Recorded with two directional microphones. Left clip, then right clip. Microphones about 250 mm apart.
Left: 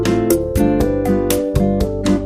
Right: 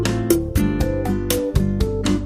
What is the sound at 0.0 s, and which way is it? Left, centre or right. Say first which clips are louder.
Music: left 4 dB; centre.